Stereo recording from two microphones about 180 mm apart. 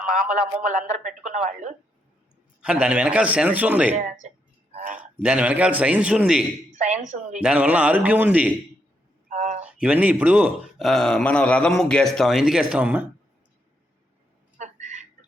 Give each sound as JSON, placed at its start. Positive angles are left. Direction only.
{"t": 0.3, "sound": "speech", "side_deg": -45}
{"t": 2.6, "sound": "a man's voice", "side_deg": -5}
{"t": 3.9, "sound": "a woman's voice", "side_deg": -40}
{"t": 5.2, "sound": "a man's voice", "side_deg": -5}
{"t": 6.7, "sound": "a woman's voice", "side_deg": -40}
{"t": 7.4, "sound": "a man's voice", "side_deg": -5}
{"t": 9.8, "sound": "speech", "side_deg": -10}
{"t": 14.6, "sound": "a sound", "side_deg": -40}